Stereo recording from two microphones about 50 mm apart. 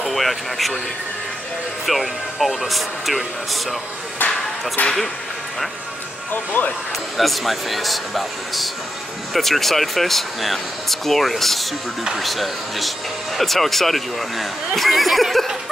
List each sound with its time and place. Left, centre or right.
0.0 s speech: centre
1.9 s speech: centre
4.8 s speech: centre
6.3 s speech: left
7.2 s speech: centre